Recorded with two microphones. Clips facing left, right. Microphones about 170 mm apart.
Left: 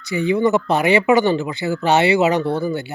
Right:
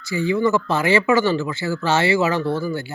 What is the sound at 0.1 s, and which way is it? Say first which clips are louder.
Speech: left 2 dB; 20° left (ahead or behind).